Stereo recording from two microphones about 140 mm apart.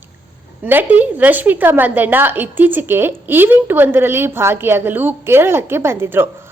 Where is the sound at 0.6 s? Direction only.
10° right (ahead or behind).